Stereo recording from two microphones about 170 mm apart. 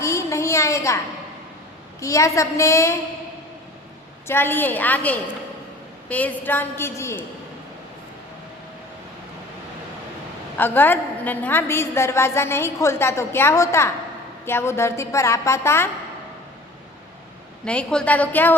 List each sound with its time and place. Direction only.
0.0 s a sound: 15° left (ahead or behind)
2.0 s a woman's voice: 20° left (ahead or behind)
4.3 s a woman's voice: 15° left (ahead or behind)
10.6 s a woman's voice: 10° left (ahead or behind)
17.7 s a woman's voice: 5° left (ahead or behind)